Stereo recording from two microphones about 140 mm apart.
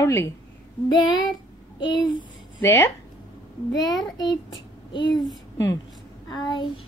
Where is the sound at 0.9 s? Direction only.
35° left (ahead or behind).